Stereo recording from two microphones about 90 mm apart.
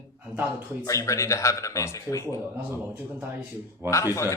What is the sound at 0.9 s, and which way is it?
A man's voice, 35° left (ahead or behind).